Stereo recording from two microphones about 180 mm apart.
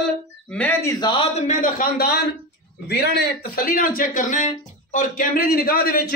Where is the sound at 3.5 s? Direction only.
50° left (ahead or behind).